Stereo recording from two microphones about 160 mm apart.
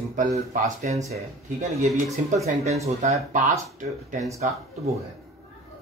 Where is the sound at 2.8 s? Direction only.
45° right (ahead or behind).